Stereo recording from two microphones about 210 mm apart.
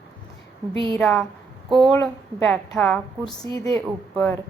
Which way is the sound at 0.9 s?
Centre (ahead or behind).